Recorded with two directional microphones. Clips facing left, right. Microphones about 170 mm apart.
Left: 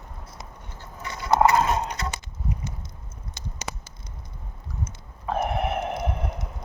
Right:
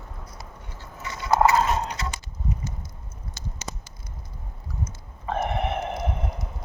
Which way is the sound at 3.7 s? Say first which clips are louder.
Left 2 dB; 75° left (ahead or behind).